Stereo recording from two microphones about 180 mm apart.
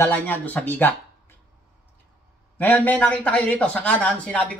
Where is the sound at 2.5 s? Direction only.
10° left (ahead or behind).